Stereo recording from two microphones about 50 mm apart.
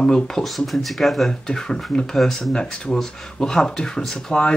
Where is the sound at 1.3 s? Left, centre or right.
Centre.